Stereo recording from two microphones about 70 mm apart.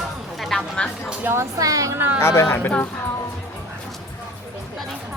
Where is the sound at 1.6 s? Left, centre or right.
Right.